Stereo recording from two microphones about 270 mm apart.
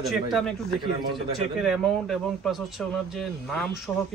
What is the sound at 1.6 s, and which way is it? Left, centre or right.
Speech, centre.